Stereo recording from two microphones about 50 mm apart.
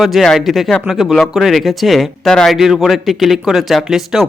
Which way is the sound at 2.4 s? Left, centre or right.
Centre.